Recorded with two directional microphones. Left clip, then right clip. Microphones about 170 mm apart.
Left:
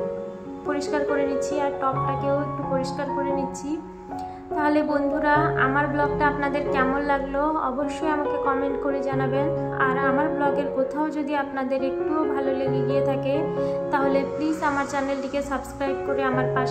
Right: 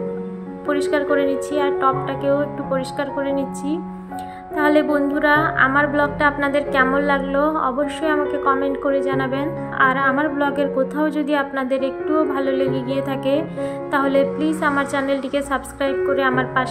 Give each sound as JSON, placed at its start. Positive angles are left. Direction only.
{"t": 0.7, "sound": "a woman's voice", "side_deg": -25}
{"t": 4.6, "sound": "a woman's voice", "side_deg": -25}